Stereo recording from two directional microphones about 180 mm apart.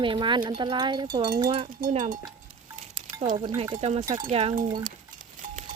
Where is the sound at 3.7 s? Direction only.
35° right (ahead or behind).